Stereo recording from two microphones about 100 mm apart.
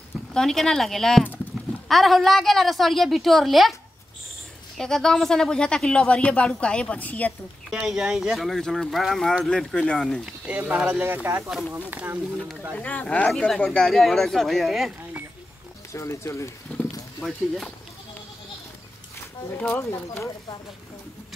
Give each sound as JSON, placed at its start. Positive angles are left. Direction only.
{"t": 0.3, "sound": "a woman's voice", "side_deg": 5}
{"t": 4.7, "sound": "speech", "side_deg": 5}
{"t": 7.7, "sound": "a woman's voice", "side_deg": -5}
{"t": 10.2, "sound": "speech", "side_deg": -10}
{"t": 12.4, "sound": "speech", "side_deg": 5}
{"t": 13.3, "sound": "a woman's voice", "side_deg": 0}
{"t": 15.9, "sound": "speech", "side_deg": 30}
{"t": 17.2, "sound": "a woman's voice", "side_deg": 5}
{"t": 19.5, "sound": "speech", "side_deg": 15}
{"t": 19.9, "sound": "speech", "side_deg": 30}